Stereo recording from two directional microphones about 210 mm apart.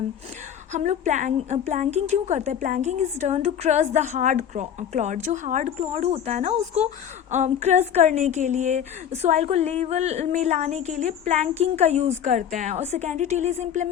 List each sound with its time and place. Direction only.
0.7 s a woman's voice: 35° right (ahead or behind)